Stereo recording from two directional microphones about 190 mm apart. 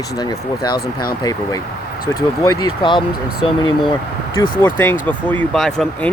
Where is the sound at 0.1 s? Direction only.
20° left (ahead or behind).